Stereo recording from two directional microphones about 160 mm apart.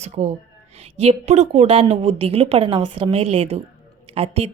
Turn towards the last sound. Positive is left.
turn(degrees=-35)  # may be behind; listen again after turning